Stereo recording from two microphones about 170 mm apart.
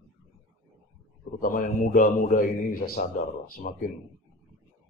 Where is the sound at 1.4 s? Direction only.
55° left (ahead or behind).